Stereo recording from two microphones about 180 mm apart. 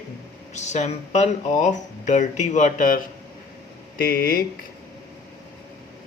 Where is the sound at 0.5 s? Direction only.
40° left (ahead or behind).